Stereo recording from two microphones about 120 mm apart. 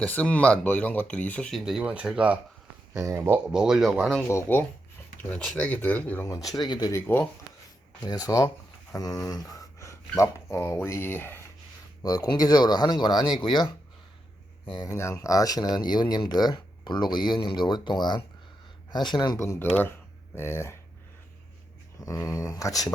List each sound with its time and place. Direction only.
0.0 s speech: 10° left (ahead or behind); by 2.4 s 10° right (ahead or behind)
2.9 s speech: 25° right (ahead or behind)
3.5 s speech: 5° right (ahead or behind)
4.3 s speech: 20° left (ahead or behind)
5.3 s speech: 10° left (ahead or behind)
6.5 s speech: 35° left (ahead or behind)
6.9 s speech: 20° left (ahead or behind)
8.0 s speech: 30° left (ahead or behind)
12.0 s speech: 30° left (ahead or behind)
14.8 s speech: 25° left (ahead or behind)
19.4 s speech: 20° left (ahead or behind)
22.0 s speech: 25° left (ahead or behind)